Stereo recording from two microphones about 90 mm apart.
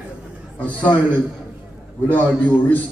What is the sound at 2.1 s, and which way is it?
Speech, 20° left (ahead or behind).